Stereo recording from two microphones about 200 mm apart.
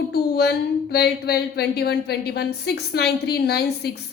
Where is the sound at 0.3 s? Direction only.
55° left (ahead or behind).